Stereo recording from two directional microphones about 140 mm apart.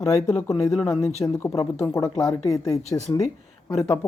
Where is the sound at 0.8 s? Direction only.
25° left (ahead or behind).